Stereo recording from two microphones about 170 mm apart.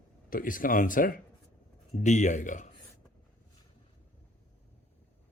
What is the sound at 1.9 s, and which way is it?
Speech, 45° left (ahead or behind).